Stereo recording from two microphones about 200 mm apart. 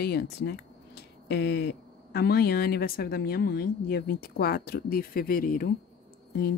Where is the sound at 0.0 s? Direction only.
50° left (ahead or behind).